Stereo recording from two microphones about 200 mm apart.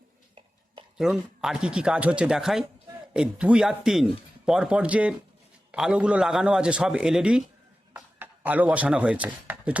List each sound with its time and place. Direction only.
0.9 s speech: 5° right (ahead or behind)